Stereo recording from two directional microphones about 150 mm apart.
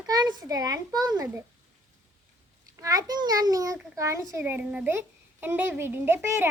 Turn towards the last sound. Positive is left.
turn(degrees=-15)  # may be behind; listen again after turning